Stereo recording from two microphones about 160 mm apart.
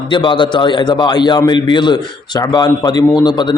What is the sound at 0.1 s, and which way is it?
A man's voice, 30° left (ahead or behind).